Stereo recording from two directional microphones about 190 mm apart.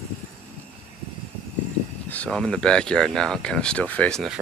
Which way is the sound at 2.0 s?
5° left (ahead or behind).